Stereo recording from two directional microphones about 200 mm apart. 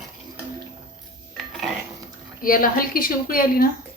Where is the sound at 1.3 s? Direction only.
Centre (ahead or behind).